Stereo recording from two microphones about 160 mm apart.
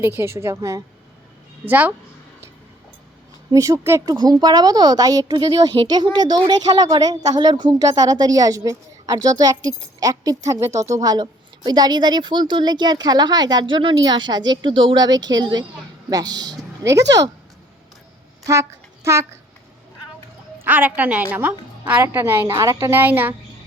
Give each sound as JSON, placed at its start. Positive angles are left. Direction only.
{"t": 0.0, "sound": "a woman's voice", "side_deg": -15}
{"t": 3.5, "sound": "a woman's voice", "side_deg": -20}
{"t": 20.6, "sound": "a woman's voice", "side_deg": -10}